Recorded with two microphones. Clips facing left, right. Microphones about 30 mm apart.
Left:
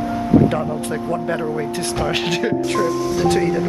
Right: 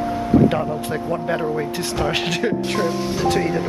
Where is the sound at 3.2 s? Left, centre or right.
Centre.